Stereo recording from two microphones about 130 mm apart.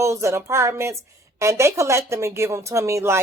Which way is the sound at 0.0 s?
20° right (ahead or behind).